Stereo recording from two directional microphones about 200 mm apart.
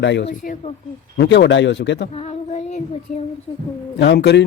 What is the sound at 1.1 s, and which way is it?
Speech, 55° left (ahead or behind).